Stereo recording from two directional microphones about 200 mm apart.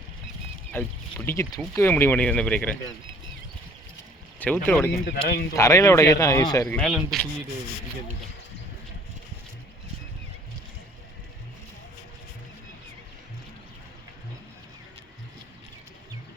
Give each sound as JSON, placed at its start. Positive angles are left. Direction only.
{"t": 0.7, "sound": "speech", "side_deg": 10}
{"t": 4.4, "sound": "speech", "side_deg": 10}
{"t": 5.1, "sound": "speech", "side_deg": 50}
{"t": 5.5, "sound": "speech", "side_deg": 15}